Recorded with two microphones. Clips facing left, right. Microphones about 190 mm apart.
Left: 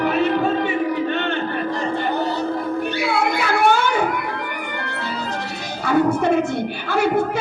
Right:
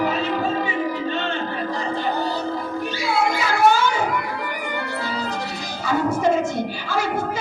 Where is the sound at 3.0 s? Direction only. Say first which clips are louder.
Right 1 dB; 60° left (ahead or behind).